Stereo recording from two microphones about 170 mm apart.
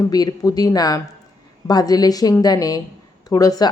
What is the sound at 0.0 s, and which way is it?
A woman's voice, 20° left (ahead or behind).